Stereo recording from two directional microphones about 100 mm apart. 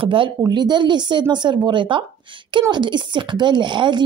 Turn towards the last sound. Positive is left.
turn(degrees=-50)  # may be behind; listen again after turning